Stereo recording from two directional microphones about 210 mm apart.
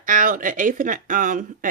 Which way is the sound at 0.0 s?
40° right (ahead or behind).